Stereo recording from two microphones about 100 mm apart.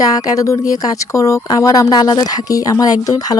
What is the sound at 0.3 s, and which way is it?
A woman's voice, 35° left (ahead or behind).